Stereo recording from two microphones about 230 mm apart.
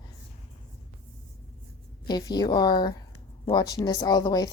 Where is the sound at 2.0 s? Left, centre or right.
Centre.